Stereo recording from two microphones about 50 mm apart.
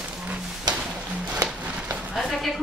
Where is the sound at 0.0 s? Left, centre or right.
Right.